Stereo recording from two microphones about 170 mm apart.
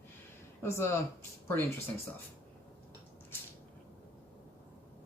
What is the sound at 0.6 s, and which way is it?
Speech, 15° left (ahead or behind).